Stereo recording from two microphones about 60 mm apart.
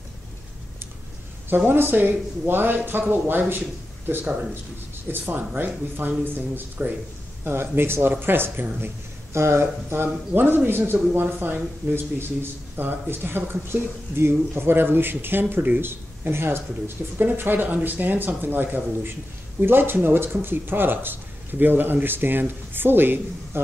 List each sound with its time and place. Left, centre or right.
1.7 s a man's voice: right
5.0 s a man's voice: right
7.7 s a man's voice: right